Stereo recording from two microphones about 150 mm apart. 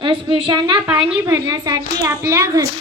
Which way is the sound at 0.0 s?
35° right (ahead or behind).